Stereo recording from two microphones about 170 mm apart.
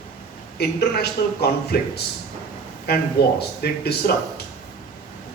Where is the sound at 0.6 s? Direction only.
75° left (ahead or behind).